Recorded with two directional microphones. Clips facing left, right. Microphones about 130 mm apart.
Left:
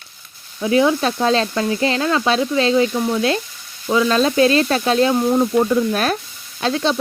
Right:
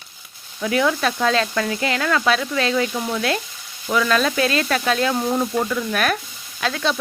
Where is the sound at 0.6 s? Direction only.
25° left (ahead or behind).